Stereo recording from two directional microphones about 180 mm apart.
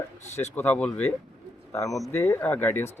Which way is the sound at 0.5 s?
10° left (ahead or behind).